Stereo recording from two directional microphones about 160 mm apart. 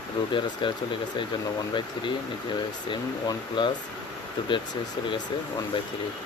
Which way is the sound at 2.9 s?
30° left (ahead or behind).